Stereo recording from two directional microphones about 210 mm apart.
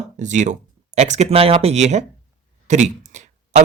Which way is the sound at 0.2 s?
35° right (ahead or behind).